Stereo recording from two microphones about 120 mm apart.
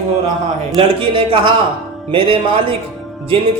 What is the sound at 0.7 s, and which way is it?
A woman's voice, 45° right (ahead or behind).